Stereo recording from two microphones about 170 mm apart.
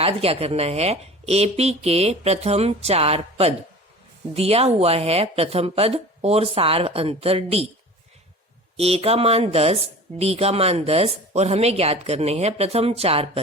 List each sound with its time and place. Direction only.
0.0 s a woman's voice: 35° right (ahead or behind)
8.7 s a woman's voice: 35° right (ahead or behind)